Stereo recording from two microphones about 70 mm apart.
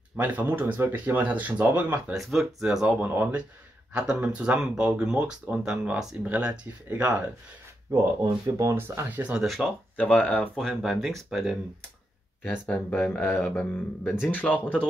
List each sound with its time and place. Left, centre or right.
0.2 s speech: right
2.1 s speech: centre
3.0 s speech: right
7.9 s speech: right
8.7 s speech: right
9.4 s speech: centre
9.9 s speech: centre
10.5 s speech: centre
12.9 s speech: left
14.0 s speech: centre
14.3 s speech: left